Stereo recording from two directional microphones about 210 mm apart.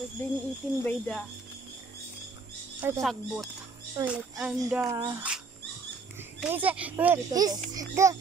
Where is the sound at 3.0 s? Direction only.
Centre (ahead or behind).